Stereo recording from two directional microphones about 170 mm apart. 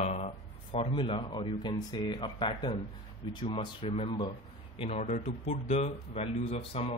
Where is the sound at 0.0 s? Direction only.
40° left (ahead or behind).